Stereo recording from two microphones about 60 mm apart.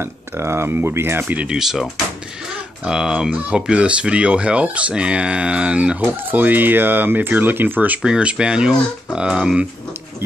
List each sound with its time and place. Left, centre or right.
0.0 s speech: right
1.5 s speech: centre; by 8.0 s right
8.0 s speech: centre